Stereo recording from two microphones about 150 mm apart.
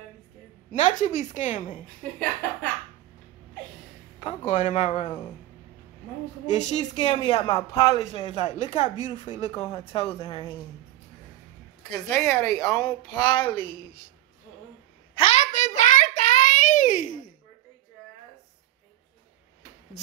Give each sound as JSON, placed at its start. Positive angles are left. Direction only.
{"t": 0.7, "sound": "speech", "side_deg": 55}
{"t": 4.5, "sound": "speech", "side_deg": 55}
{"t": 6.5, "sound": "speech", "side_deg": 50}
{"t": 7.2, "sound": "speech", "side_deg": 30}
{"t": 9.5, "sound": "a woman's voice", "side_deg": 25}
{"t": 9.8, "sound": "speech", "side_deg": 40}
{"t": 12.1, "sound": "a woman's voice", "side_deg": 20}
{"t": 15.1, "sound": "child singing", "side_deg": 45}